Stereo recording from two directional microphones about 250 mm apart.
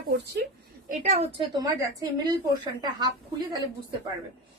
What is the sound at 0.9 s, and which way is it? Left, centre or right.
Speech, right.